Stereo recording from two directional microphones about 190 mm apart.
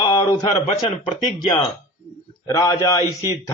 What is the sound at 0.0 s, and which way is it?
A man's voice, 25° left (ahead or behind).